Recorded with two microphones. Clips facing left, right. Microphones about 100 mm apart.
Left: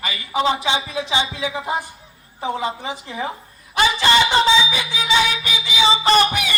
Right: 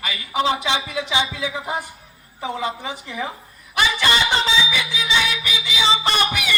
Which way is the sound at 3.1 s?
35° left (ahead or behind).